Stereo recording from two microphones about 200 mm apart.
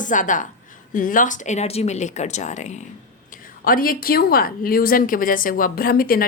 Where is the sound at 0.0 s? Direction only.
40° left (ahead or behind).